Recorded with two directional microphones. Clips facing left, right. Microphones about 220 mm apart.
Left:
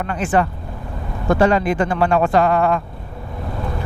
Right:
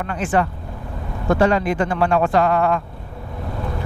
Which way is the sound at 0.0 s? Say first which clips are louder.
Left 2 dB; 15° left (ahead or behind).